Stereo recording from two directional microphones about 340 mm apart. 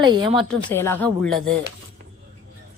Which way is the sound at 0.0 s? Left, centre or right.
Centre.